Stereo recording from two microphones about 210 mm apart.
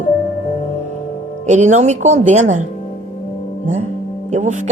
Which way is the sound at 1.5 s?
35° right (ahead or behind).